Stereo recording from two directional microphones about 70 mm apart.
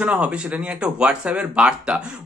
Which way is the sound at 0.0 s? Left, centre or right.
Centre.